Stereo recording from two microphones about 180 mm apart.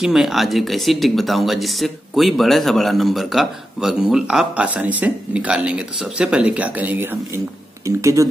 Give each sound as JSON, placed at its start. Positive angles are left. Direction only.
{"t": 0.0, "sound": "speech", "side_deg": 0}